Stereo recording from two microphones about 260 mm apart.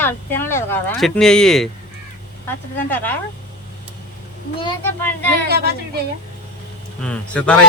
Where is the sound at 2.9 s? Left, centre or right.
Centre.